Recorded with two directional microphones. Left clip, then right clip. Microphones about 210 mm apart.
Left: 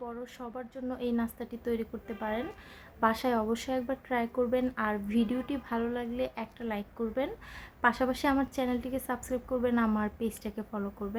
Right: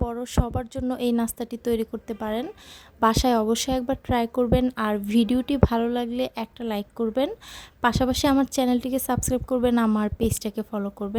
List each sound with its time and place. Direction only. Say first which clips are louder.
0.1 s a woman's voice: right 11 dB; 50° right (ahead or behind)